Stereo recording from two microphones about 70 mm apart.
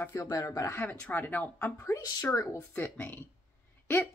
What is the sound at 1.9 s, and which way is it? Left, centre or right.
Speech, left.